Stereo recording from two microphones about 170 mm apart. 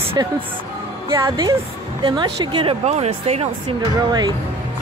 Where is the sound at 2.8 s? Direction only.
40° right (ahead or behind).